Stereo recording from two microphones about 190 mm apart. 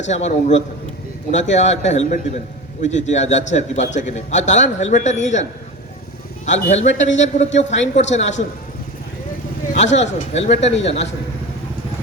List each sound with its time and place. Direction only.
0.1 s a man's voice: 35° left (ahead or behind)
9.7 s a man's voice: 35° left (ahead or behind)